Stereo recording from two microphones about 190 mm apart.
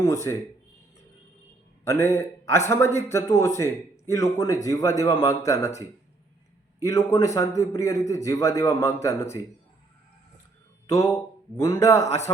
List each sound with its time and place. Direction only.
0.0 s speech: 15° left (ahead or behind)
1.8 s a man's voice: 15° left (ahead or behind)
6.8 s speech: 15° left (ahead or behind)
10.9 s speech: 15° left (ahead or behind)